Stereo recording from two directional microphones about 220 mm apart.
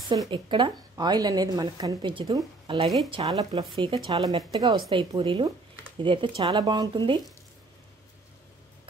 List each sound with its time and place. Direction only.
0.1 s speech: 20° right (ahead or behind)